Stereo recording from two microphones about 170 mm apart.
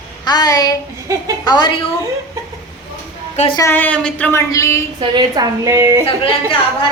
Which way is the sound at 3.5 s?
15° left (ahead or behind).